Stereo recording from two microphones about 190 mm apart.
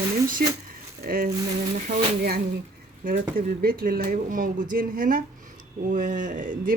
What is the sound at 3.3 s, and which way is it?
Speech, 50° right (ahead or behind).